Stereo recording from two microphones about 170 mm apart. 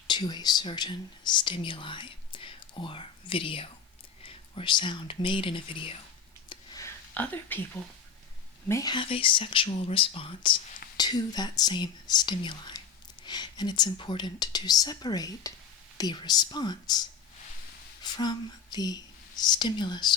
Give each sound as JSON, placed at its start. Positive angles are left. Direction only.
{"t": 0.1, "sound": "speech", "side_deg": 25}
{"t": 6.5, "sound": "a sound", "side_deg": 20}
{"t": 7.1, "sound": "speech", "side_deg": 10}
{"t": 8.6, "sound": "speech", "side_deg": 20}
{"t": 18.0, "sound": "speech", "side_deg": 25}